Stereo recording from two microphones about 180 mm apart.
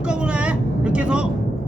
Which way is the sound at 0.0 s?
5° right (ahead or behind).